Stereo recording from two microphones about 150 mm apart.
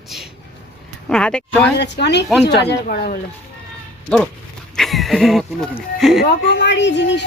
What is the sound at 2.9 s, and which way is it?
Speech, 90° left.